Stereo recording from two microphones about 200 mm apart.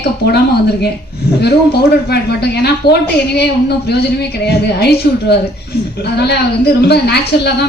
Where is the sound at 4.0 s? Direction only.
55° left (ahead or behind).